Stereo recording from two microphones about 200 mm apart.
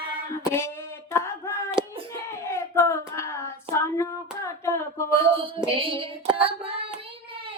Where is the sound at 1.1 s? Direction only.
15° left (ahead or behind).